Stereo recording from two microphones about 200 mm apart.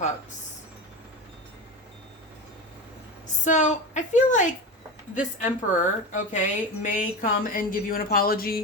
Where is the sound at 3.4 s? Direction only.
35° left (ahead or behind).